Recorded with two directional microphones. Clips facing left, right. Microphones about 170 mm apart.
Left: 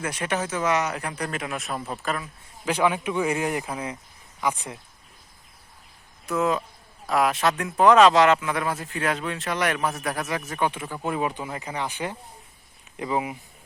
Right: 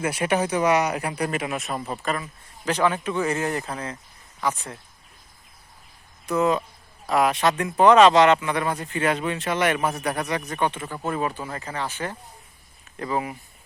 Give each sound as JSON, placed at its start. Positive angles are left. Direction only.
{"t": 0.0, "sound": "speech", "side_deg": -10}
{"t": 6.2, "sound": "speech", "side_deg": 0}